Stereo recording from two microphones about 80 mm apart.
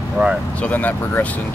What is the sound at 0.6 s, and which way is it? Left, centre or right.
Speech, centre.